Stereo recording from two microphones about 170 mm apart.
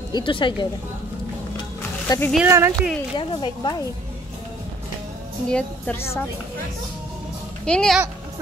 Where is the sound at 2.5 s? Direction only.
15° right (ahead or behind).